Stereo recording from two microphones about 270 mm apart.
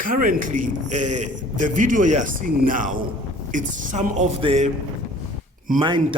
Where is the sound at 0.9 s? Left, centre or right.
Right.